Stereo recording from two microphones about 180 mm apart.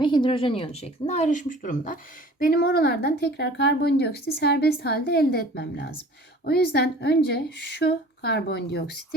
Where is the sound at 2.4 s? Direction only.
55° left (ahead or behind).